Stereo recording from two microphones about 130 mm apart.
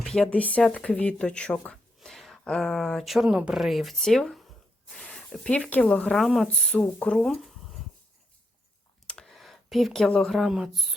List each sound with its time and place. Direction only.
0.0 s speech: 5° left (ahead or behind)
9.0 s speech: 5° left (ahead or behind)